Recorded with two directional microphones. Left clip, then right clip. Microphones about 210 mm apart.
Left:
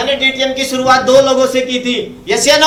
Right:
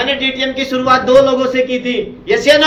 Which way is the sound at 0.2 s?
65° left (ahead or behind).